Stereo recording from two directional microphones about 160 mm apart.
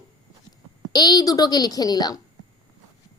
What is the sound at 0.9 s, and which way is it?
Speech, 25° left (ahead or behind).